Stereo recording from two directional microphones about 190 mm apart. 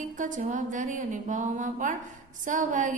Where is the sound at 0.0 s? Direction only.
40° right (ahead or behind).